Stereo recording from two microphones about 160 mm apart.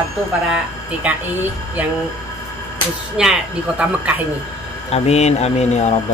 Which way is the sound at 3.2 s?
5° right (ahead or behind).